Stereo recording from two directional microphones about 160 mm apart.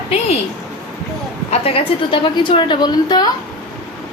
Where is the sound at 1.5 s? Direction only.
35° left (ahead or behind).